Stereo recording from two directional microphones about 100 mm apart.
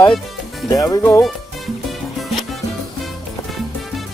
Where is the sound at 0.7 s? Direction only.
35° left (ahead or behind).